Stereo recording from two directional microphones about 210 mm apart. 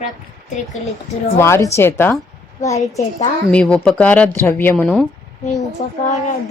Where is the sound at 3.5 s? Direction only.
5° left (ahead or behind).